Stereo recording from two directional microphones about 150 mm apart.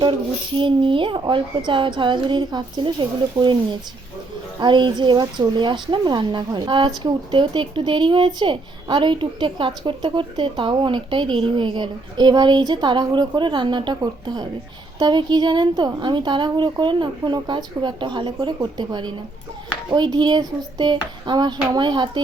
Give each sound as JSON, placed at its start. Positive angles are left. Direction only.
{"t": 0.0, "sound": "a woman's voice", "side_deg": -35}